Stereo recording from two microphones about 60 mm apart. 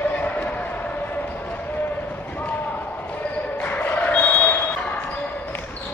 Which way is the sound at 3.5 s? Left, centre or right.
Left.